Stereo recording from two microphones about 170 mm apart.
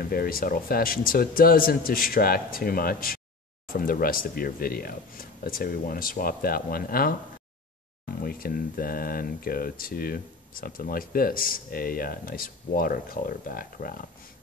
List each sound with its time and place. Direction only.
0.1 s speech: 60° left (ahead or behind)
8.2 s speech: 60° left (ahead or behind)